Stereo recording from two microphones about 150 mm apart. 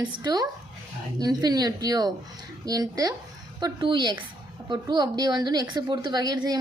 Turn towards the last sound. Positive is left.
turn(degrees=-25)  # may be behind; listen again after turning